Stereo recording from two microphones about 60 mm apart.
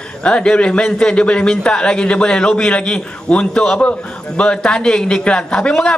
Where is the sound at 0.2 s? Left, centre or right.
Centre.